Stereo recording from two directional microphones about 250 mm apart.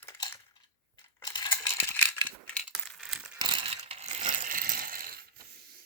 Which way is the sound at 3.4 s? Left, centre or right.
Centre.